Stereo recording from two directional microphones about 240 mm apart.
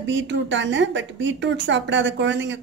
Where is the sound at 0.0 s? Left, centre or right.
Right.